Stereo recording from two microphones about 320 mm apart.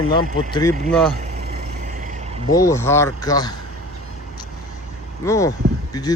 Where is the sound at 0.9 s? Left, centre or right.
Centre.